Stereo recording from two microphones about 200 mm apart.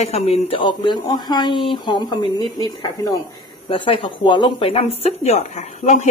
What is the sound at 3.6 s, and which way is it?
Speech, 25° left (ahead or behind).